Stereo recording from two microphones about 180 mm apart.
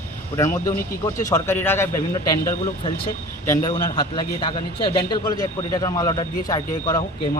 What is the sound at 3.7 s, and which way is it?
A man's voice, 25° left (ahead or behind).